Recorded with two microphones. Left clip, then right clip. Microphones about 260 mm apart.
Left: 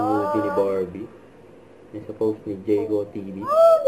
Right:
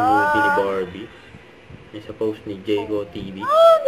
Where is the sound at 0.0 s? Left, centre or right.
Right.